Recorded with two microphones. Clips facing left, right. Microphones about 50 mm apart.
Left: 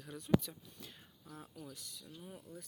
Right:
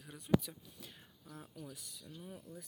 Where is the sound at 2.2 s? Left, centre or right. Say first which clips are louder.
Even; centre.